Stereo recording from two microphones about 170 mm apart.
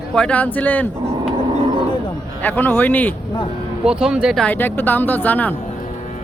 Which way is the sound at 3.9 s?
5° right (ahead or behind).